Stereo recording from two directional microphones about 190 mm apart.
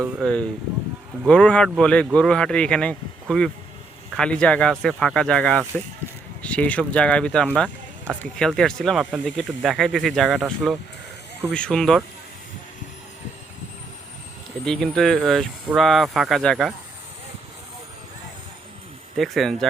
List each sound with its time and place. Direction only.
0.2 s speech: 5° left (ahead or behind)
14.6 s speech: 5° left (ahead or behind)
19.1 s speech: centre (ahead or behind)